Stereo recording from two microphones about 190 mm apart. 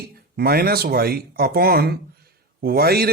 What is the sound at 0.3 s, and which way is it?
Speech, 55° right (ahead or behind).